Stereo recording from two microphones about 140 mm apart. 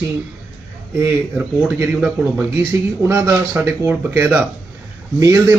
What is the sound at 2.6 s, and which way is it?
A man's voice, 20° right (ahead or behind).